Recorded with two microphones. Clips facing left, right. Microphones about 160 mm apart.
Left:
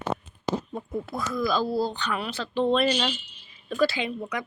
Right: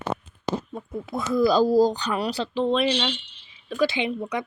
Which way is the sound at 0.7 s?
5° left (ahead or behind).